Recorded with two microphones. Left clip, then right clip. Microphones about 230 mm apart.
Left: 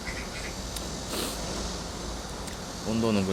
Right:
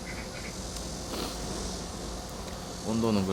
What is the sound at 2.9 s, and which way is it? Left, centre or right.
Speech, centre.